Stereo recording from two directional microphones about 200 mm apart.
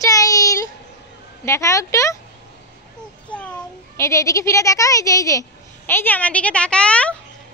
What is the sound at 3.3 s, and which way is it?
A child's voice, 5° left (ahead or behind).